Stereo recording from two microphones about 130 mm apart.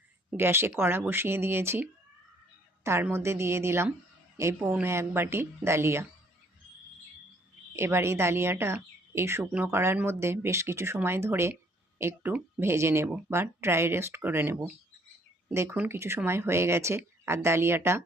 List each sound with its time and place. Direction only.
0.3 s speech: 15° right (ahead or behind)
7.8 s speech: 20° right (ahead or behind)